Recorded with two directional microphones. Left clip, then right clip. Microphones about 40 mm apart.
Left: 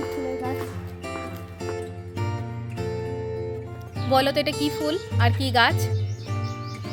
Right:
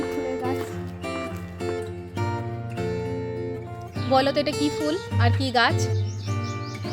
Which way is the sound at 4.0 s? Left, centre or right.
Centre.